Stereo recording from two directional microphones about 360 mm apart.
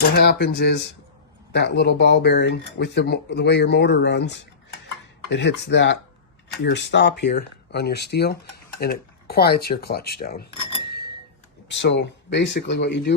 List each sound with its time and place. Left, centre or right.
0.2 s speech: left
11.7 s speech: left